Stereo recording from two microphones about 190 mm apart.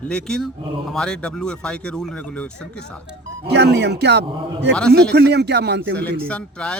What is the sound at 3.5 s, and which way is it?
Speech, 65° right (ahead or behind).